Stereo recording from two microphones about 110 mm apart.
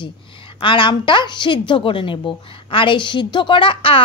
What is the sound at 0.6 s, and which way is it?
A woman's voice, 50° left (ahead or behind).